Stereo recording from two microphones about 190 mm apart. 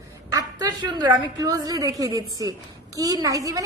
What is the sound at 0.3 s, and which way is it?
A woman's voice, 20° right (ahead or behind).